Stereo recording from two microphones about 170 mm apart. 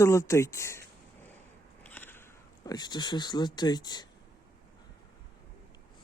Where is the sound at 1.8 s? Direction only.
10° left (ahead or behind).